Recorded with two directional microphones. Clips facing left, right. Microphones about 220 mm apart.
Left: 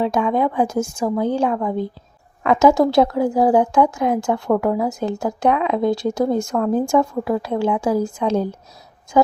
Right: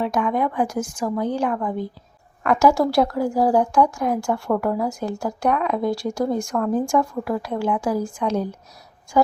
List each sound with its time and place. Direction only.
0.1 s speech: 25° left (ahead or behind)